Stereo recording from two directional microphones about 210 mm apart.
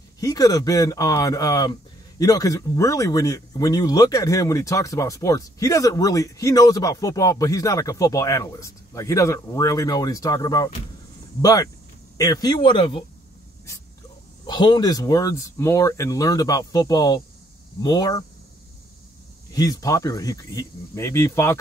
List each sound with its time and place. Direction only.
0.2 s speech: 15° left (ahead or behind)
14.4 s speech: 20° left (ahead or behind)
19.5 s speech: 20° left (ahead or behind)